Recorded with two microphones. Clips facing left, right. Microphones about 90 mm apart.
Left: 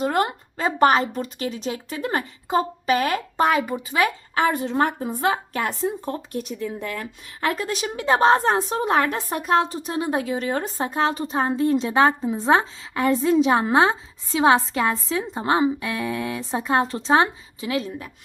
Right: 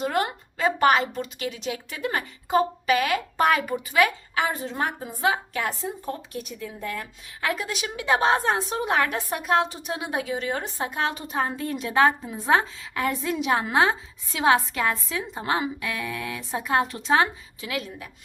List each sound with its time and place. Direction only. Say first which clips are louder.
0.0 s a woman's voice: left 3 dB; 30° left (ahead or behind)
4.4 s a woman's voice: left 9 dB; 55° left (ahead or behind); by 18.1 s 30° left (ahead or behind)